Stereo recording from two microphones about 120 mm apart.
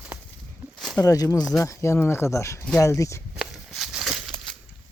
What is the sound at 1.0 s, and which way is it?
Speech, 30° left (ahead or behind).